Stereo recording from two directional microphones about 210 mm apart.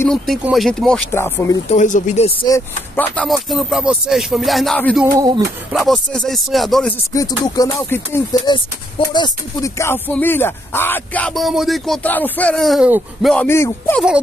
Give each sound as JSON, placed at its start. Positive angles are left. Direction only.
{"t": 0.1, "sound": "speech", "side_deg": 0}
{"t": 1.7, "sound": "speech", "side_deg": 35}
{"t": 2.4, "sound": "speech", "side_deg": 10}
{"t": 5.0, "sound": "a sound", "side_deg": -20}
{"t": 5.7, "sound": "speech", "side_deg": 0}
{"t": 7.2, "sound": "speech", "side_deg": 20}